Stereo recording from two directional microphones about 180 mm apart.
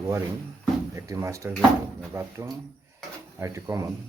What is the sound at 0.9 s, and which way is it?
Speech, 15° right (ahead or behind).